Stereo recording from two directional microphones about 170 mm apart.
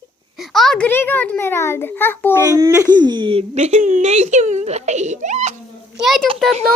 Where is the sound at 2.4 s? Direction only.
15° right (ahead or behind); by 5.6 s 45° right (ahead or behind).